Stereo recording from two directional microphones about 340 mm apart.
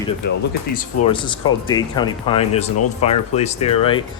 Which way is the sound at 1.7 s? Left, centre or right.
Centre.